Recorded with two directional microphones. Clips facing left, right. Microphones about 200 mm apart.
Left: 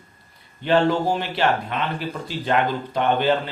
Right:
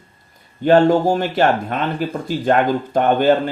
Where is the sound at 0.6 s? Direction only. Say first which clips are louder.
Right 6 dB; 45° right (ahead or behind).